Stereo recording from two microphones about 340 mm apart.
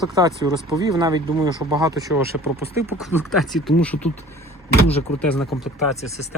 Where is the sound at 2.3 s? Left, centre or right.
Left.